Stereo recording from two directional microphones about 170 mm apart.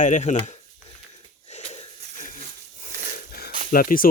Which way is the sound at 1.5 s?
40° left (ahead or behind).